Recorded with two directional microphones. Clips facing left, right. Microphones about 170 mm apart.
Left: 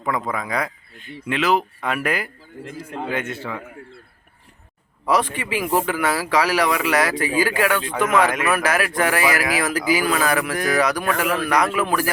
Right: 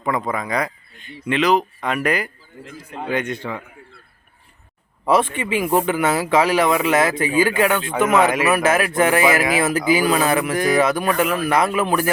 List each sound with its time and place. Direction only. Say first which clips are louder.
0.0 s speech: right 2 dB; centre (ahead or behind)
5.0 s speech: right 3 dB; 25° right (ahead or behind)